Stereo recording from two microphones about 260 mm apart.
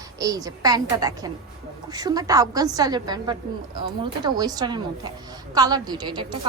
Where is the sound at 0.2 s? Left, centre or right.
Centre.